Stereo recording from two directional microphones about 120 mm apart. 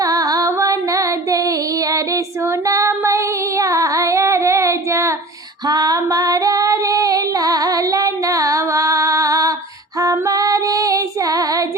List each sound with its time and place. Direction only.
0.0 s music: 30° right (ahead or behind)
5.6 s female singing: 35° right (ahead or behind)